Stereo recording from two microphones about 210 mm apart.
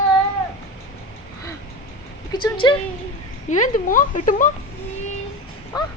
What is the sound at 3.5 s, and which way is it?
Speech, 40° left (ahead or behind).